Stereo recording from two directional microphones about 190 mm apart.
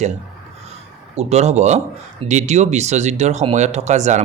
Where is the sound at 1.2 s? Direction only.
35° right (ahead or behind).